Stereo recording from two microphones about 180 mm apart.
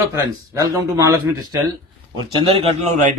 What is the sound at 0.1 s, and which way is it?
Speech, 15° right (ahead or behind).